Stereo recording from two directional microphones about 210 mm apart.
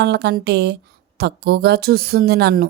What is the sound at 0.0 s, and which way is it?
A woman's voice, 50° right (ahead or behind).